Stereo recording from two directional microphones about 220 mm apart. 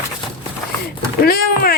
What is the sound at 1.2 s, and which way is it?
Speech, 40° left (ahead or behind).